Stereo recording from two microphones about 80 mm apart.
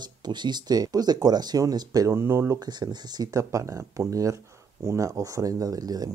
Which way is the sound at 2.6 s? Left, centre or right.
Right.